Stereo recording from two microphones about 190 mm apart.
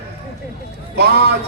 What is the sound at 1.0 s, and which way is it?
Speech, 55° right (ahead or behind).